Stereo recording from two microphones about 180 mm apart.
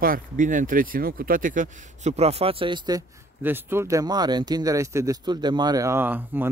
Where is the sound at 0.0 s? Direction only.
50° right (ahead or behind).